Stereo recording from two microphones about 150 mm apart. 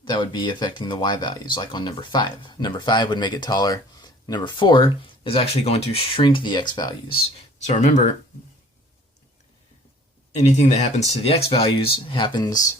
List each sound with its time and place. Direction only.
0.0 s speech: 30° left (ahead or behind)
7.6 s speech: 50° left (ahead or behind)
10.3 s speech: 50° left (ahead or behind); by 12.7 s 25° left (ahead or behind)